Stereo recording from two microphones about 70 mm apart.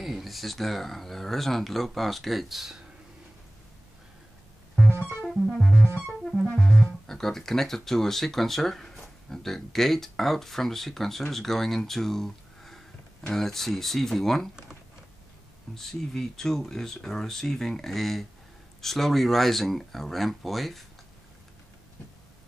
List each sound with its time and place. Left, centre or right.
0.0 s speech: centre
5.2 s music: centre
5.7 s music: left
6.3 s speech: centre
15.7 s speech: centre